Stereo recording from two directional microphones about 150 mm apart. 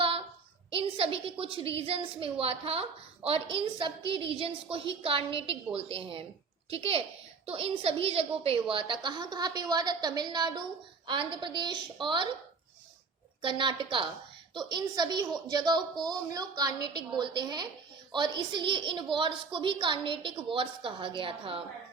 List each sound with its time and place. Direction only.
0.7 s a woman's voice: 40° right (ahead or behind)
13.4 s a woman's voice: 35° right (ahead or behind)